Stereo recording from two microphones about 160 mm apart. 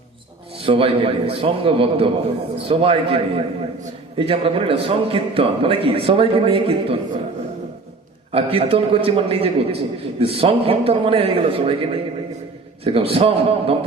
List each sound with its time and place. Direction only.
0.6 s a man's voice: 35° right (ahead or behind)
8.3 s a man's voice: 35° right (ahead or behind)